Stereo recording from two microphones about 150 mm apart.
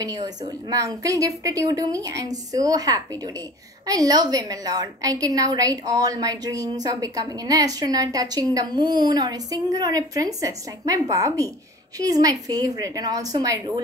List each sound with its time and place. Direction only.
0.0 s a woman's voice: 25° right (ahead or behind)